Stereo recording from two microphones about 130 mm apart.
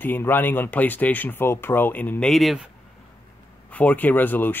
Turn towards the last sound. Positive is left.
turn(degrees=15)  # may be behind; listen again after turning